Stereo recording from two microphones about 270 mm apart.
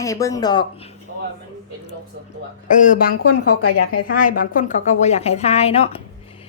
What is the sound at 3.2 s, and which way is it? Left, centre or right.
Speech, left.